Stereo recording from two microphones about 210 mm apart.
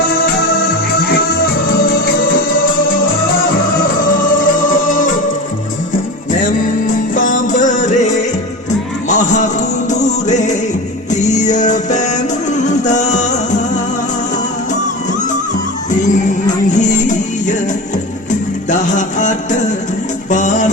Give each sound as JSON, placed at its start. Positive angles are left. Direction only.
{"t": 0.9, "sound": "music", "side_deg": 50}
{"t": 4.4, "sound": "music", "side_deg": 40}
{"t": 6.4, "sound": "music", "side_deg": 40}
{"t": 16.6, "sound": "music", "side_deg": 35}
{"t": 18.7, "sound": "music", "side_deg": 35}